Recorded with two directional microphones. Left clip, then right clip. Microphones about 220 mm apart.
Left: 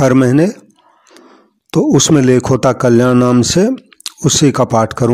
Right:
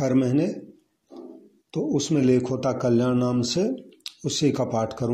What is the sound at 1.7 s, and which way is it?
Speech, 40° left (ahead or behind).